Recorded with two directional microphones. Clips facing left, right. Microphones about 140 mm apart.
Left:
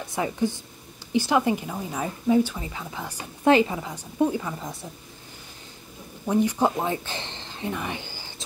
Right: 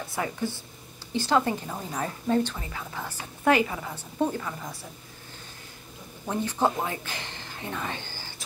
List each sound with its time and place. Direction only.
0.1 s a woman's voice: 15° left (ahead or behind)
6.4 s a woman's voice: 15° left (ahead or behind)
6.9 s a sound: 25° left (ahead or behind)